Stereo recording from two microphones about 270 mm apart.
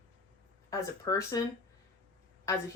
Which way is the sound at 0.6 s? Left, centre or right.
Centre.